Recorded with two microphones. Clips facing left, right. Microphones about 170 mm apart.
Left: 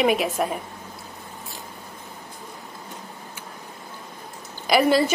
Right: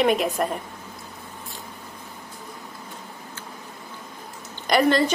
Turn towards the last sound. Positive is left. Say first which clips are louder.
# left 1 dB
turn(degrees=5)  # may be behind; listen again after turning